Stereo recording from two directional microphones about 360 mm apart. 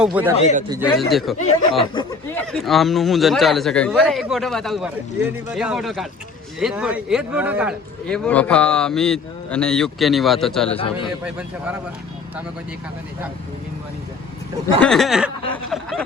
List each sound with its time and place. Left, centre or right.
0.0 s speech: centre
1.8 s speech: centre
10.7 s a man's voice: centre
11.2 s speech: centre
14.8 s speech: centre